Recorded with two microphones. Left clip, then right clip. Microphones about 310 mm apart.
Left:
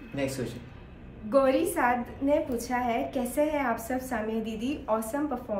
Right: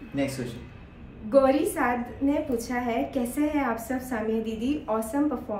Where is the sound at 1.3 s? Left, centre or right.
Centre.